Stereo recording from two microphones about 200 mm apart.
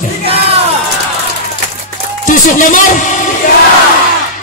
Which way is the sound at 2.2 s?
40° left (ahead or behind).